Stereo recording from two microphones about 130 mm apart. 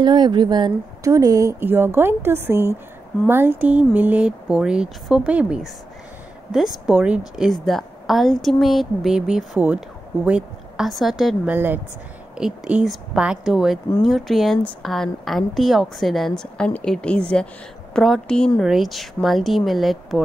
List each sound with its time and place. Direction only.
0.0 s a woman's voice: 35° right (ahead or behind); by 11.5 s centre (ahead or behind)
11.5 s a woman's voice: 15° right (ahead or behind); by 20.2 s centre (ahead or behind)